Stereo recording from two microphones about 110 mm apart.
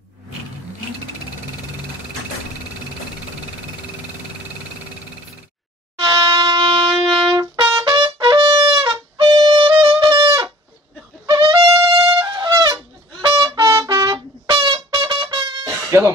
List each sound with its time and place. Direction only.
5.9 s wind instrument: 55° right (ahead or behind)
7.8 s trumpet: 50° right (ahead or behind)
8.8 s music: 40° right (ahead or behind)
11.2 s trumpet: 45° right (ahead or behind)
15.3 s music: 45° right (ahead or behind)
15.6 s a sound: 30° right (ahead or behind)